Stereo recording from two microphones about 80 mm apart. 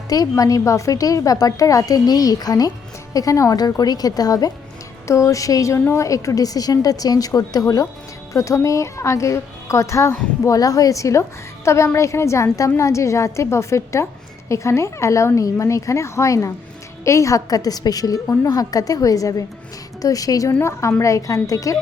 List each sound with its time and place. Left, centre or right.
0.1 s a woman's voice: left
5.0 s a woman's voice: left
20.6 s a woman's voice: left